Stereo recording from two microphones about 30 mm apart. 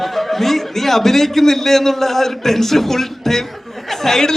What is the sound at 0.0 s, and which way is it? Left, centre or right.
A man's voice, centre.